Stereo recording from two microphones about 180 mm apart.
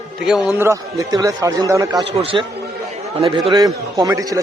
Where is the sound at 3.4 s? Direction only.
20° right (ahead or behind).